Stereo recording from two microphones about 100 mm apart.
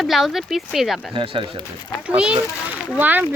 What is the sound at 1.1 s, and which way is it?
Speech, 65° right (ahead or behind).